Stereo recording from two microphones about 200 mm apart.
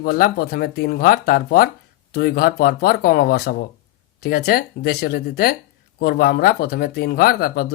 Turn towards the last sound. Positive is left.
turn(degrees=50)  # may be behind; listen again after turning